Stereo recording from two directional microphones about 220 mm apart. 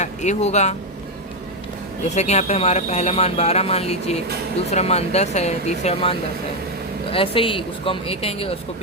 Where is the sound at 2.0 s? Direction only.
30° left (ahead or behind).